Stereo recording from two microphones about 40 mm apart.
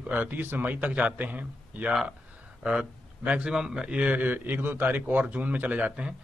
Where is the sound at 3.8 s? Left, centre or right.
Right.